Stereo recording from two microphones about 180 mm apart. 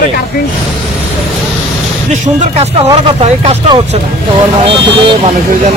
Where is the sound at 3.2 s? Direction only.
35° right (ahead or behind).